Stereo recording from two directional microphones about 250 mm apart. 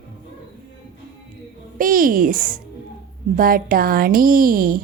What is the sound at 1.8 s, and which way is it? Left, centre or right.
A woman's voice, right.